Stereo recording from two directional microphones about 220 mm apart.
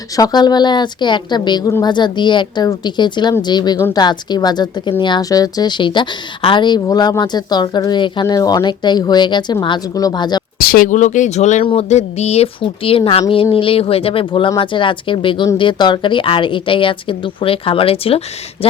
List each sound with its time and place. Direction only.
0.2 s a woman's voice: 20° left (ahead or behind)
10.6 s a woman's voice: 40° left (ahead or behind); by 18.8 s 25° left (ahead or behind)